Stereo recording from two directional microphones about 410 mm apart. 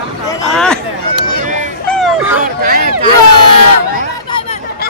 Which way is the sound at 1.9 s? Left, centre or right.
Centre.